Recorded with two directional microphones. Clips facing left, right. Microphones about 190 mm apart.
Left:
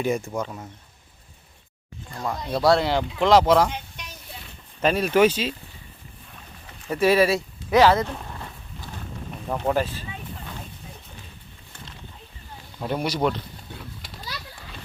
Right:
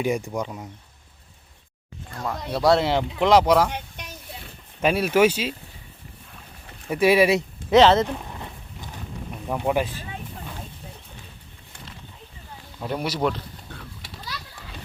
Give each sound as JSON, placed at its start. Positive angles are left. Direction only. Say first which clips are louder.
{"t": 0.0, "sound": "speech", "louder": "even", "side_deg": -15}
{"t": 2.2, "sound": "speech", "louder": "left 1 dB", "side_deg": 0}
{"t": 2.6, "sound": "speech", "louder": "right 1 dB", "side_deg": -25}
{"t": 3.7, "sound": "a sound", "louder": "right 1 dB", "side_deg": -55}
{"t": 4.8, "sound": "speech", "louder": "even", "side_deg": -10}
{"t": 6.9, "sound": "speech", "louder": "right 1 dB", "side_deg": -10}
{"t": 8.1, "sound": "horse", "louder": "right 2 dB", "side_deg": -15}
{"t": 9.5, "sound": "speech", "louder": "even", "side_deg": -10}
{"t": 12.8, "sound": "speech", "louder": "left 1 dB", "side_deg": 0}